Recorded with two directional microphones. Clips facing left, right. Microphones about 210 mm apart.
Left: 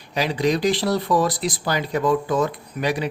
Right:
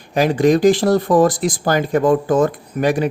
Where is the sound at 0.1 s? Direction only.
50° right (ahead or behind).